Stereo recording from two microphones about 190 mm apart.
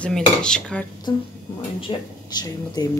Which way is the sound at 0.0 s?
5° left (ahead or behind).